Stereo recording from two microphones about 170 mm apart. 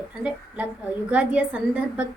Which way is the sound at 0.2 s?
5° right (ahead or behind).